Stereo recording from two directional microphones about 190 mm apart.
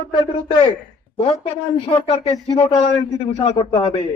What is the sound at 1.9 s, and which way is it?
A man's voice, 30° left (ahead or behind).